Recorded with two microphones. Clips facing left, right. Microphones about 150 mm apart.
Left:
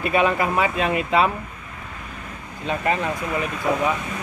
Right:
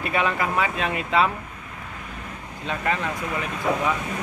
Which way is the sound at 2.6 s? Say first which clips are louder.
Left 3 dB; 20° left (ahead or behind).